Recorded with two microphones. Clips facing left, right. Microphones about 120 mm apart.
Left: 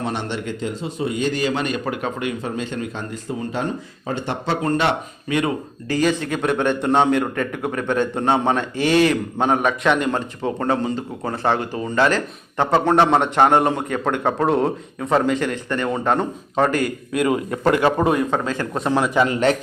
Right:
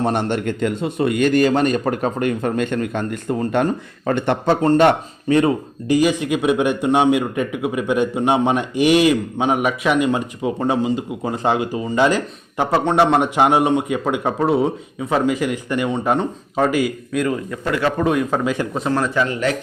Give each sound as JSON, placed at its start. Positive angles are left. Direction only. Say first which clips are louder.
{"t": 0.0, "sound": "a man's voice", "louder": "right 6 dB", "side_deg": -50}
{"t": 4.8, "sound": "speech", "louder": "right 7 dB", "side_deg": -45}
{"t": 5.9, "sound": "a man's voice", "louder": "right 3 dB", "side_deg": -15}
{"t": 17.7, "sound": "a man's voice", "louder": "right 1 dB", "side_deg": 20}
{"t": 18.0, "sound": "a man's voice", "louder": "even", "side_deg": 0}
{"t": 18.4, "sound": "a man's voice", "louder": "right 4 dB", "side_deg": -15}
{"t": 18.9, "sound": "a man's voice", "louder": "left 1 dB", "side_deg": 10}
{"t": 19.1, "sound": "a man's voice", "louder": "left 2 dB", "side_deg": 30}